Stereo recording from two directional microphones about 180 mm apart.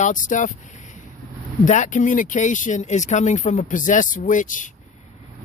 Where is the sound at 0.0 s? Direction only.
45° left (ahead or behind).